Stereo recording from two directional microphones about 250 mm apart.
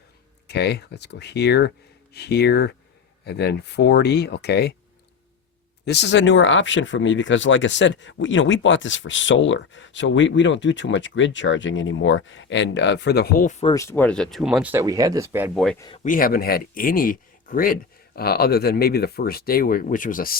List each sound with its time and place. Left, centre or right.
0.4 s speech: left
5.8 s speech: left
13.7 s speech: centre
15.5 s speech: centre
16.0 s speech: left